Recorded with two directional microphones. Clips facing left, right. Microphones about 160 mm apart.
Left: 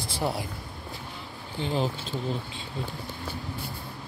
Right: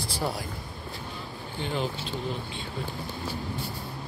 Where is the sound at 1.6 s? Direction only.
35° left (ahead or behind).